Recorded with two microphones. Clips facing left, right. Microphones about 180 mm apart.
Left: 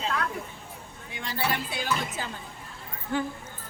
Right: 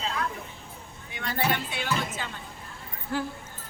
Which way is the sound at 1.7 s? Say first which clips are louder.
Even; 35° left (ahead or behind).